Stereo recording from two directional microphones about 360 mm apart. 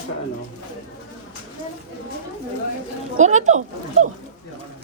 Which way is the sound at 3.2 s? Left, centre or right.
Centre.